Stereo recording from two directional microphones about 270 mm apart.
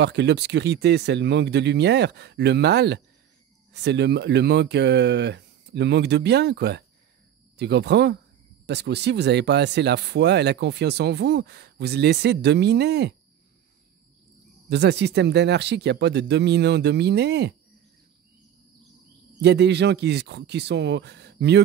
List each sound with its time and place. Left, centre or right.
0.0 s speech: right
14.7 s speech: right
19.4 s speech: right